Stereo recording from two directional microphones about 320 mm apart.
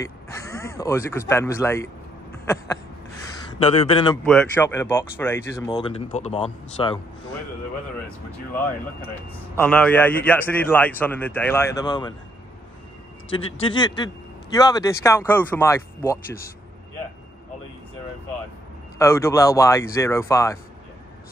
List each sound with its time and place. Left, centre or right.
0.0 s speech: centre
2.3 s a sound: centre
3.5 s speech: centre
4.2 s speech: centre
9.6 s a man's voice: centre
13.6 s speech: centre
18.9 s speech: centre